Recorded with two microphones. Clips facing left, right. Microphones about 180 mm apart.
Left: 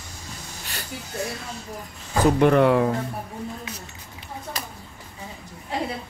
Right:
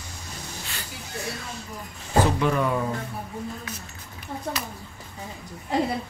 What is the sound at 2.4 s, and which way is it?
Speech, 60° left (ahead or behind).